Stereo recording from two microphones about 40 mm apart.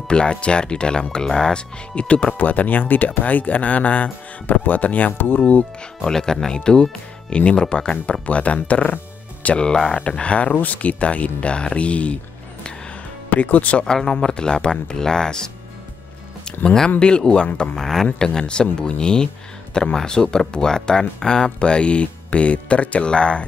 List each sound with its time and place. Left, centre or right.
0.1 s speech: left
1.5 s speech: left
2.3 s speech: left
5.1 s speech: left
6.0 s speech: centre; by 8.9 s left
9.6 s speech: left
10.5 s speech: left
13.3 s speech: left
13.8 s speech: centre
17.0 s speech: left
17.7 s speech: centre
18.2 s speech: left